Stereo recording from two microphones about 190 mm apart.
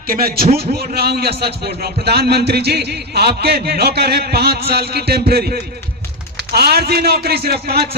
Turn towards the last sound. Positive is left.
turn(degrees=-55)  # may be behind; listen again after turning